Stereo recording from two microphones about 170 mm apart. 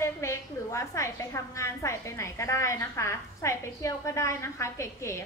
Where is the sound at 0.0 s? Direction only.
15° left (ahead or behind).